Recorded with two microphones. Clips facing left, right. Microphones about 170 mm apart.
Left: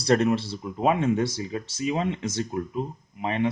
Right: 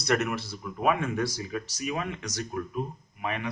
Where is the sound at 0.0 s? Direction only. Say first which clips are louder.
Left 6 dB; 30° left (ahead or behind).